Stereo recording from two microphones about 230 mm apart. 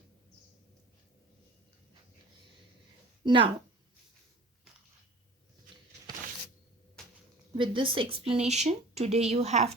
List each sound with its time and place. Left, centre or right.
3.2 s speech: right
7.0 s a sound: centre
7.5 s speech: right